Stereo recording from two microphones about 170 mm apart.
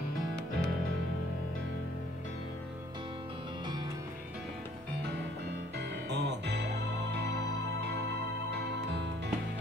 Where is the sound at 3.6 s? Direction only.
25° right (ahead or behind).